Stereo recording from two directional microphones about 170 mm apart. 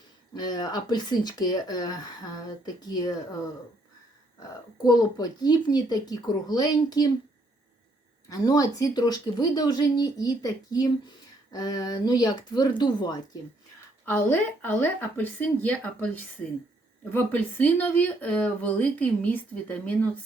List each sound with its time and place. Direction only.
0.3 s speech: 25° left (ahead or behind)
4.8 s speech: 25° left (ahead or behind)
8.3 s speech: 20° left (ahead or behind)
14.0 s speech: 10° left (ahead or behind)